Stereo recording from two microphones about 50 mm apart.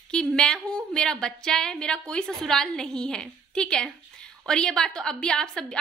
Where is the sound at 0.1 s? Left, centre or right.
Centre.